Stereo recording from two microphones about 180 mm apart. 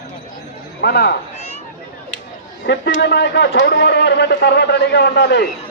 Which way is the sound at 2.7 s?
75° left (ahead or behind).